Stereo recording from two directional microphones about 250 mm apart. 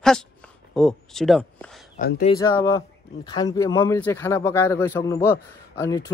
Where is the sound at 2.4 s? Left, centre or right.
Centre.